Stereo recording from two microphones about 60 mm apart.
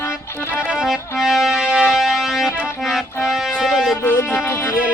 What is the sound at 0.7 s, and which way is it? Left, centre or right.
Music, centre.